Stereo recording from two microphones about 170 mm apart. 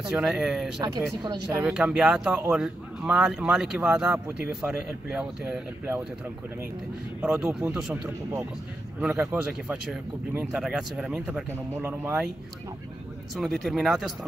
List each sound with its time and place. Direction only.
0.1 s speech: 5° right (ahead or behind)
0.7 s speech: 25° right (ahead or behind)
1.6 s speech: 5° right (ahead or behind)
7.2 s speech: 5° right (ahead or behind)
13.3 s speech: centre (ahead or behind)